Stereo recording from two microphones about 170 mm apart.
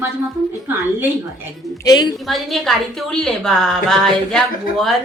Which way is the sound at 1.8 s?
25° left (ahead or behind).